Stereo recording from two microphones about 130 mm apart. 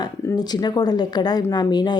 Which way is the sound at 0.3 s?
30° left (ahead or behind).